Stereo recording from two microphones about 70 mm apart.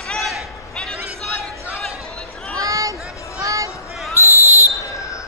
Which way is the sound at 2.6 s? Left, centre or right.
Right.